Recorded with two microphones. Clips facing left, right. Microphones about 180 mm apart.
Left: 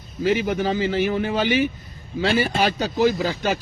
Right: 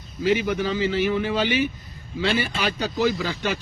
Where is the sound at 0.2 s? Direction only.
45° left (ahead or behind).